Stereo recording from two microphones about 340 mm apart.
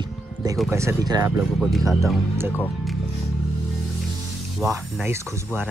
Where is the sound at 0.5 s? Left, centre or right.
Centre.